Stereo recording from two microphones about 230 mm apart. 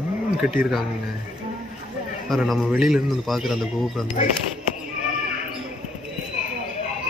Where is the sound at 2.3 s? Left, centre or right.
Centre.